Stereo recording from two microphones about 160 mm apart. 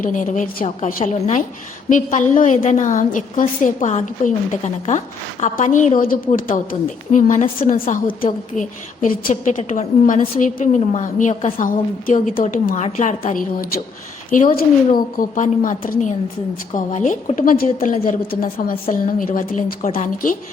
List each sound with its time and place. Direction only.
0.0 s a woman's voice: 55° left (ahead or behind)
14.3 s a woman's voice: 55° left (ahead or behind)